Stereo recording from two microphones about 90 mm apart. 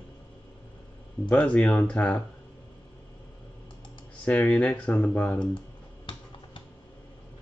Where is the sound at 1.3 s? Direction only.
10° left (ahead or behind).